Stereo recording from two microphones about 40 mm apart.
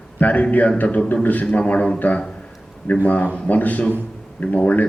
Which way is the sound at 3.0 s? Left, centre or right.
Left.